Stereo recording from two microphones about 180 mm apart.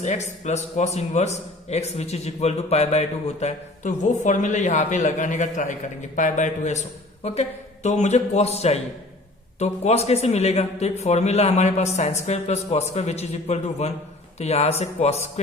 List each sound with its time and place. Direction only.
0.0 s a man's voice: 40° left (ahead or behind)